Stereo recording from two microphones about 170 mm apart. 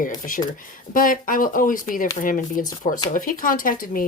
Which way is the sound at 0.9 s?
55° left (ahead or behind).